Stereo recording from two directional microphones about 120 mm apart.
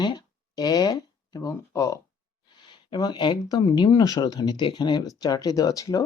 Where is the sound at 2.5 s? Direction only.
40° left (ahead or behind).